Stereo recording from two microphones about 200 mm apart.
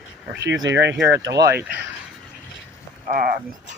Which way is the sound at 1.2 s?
55° right (ahead or behind).